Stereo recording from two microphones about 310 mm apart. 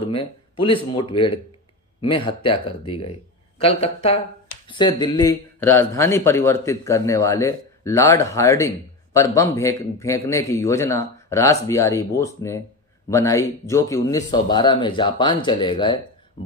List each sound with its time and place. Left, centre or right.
0.1 s a man's voice: centre